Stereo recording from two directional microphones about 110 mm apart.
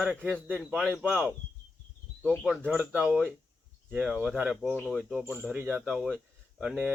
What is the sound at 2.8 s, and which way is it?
Speech, 10° right (ahead or behind).